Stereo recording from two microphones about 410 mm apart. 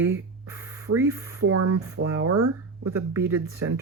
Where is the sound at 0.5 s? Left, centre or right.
Centre.